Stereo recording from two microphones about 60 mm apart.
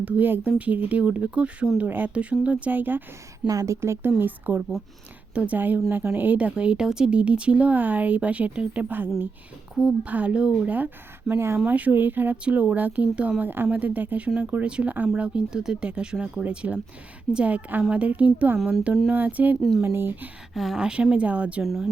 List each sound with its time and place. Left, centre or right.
0.0 s speech: right
3.4 s a woman's voice: right
3.8 s speech: right
4.2 s a woman's voice: right
5.3 s a woman's voice: centre
5.5 s a woman's voice: right
11.3 s speech: right
11.6 s speech: right
13.4 s a woman's voice: right
19.8 s a woman's voice: right
20.5 s speech: centre; by 21.6 s right
21.6 s speech: centre